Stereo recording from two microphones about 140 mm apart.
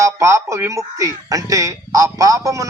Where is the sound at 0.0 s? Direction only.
20° right (ahead or behind).